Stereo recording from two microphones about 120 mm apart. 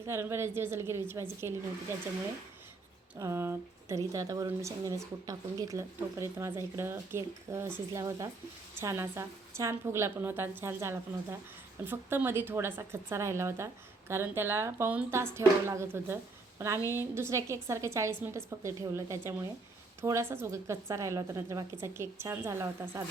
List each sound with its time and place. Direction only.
0.1 s speech: 20° right (ahead or behind)
3.2 s a woman's voice: 25° right (ahead or behind)